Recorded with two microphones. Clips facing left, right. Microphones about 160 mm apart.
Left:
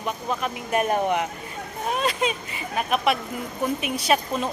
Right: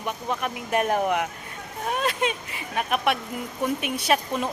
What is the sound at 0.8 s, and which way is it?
Speech, 15° left (ahead or behind).